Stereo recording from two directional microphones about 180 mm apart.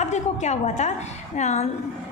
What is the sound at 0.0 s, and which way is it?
A woman's voice, 40° left (ahead or behind).